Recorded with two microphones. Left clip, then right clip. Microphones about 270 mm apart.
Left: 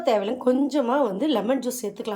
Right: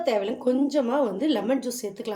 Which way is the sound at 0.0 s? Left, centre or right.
Centre.